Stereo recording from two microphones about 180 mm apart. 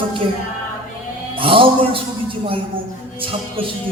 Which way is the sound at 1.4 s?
30° right (ahead or behind).